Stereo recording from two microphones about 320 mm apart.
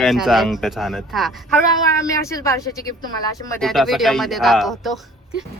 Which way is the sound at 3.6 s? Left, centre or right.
Centre.